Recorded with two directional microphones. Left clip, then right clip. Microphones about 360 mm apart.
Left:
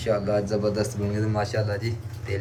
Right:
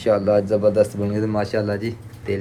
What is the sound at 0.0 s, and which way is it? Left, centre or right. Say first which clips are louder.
Speech: right 7 dB; centre.